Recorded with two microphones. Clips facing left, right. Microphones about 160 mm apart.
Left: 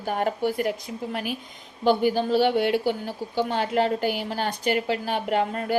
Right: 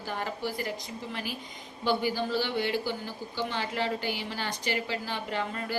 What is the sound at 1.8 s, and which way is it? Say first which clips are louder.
A woman's voice: left 7 dB; 55° left (ahead or behind).